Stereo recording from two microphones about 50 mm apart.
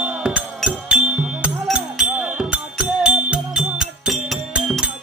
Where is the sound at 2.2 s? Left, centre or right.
Right.